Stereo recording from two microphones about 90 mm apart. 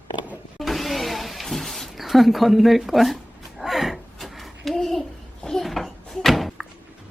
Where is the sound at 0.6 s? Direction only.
Centre (ahead or behind).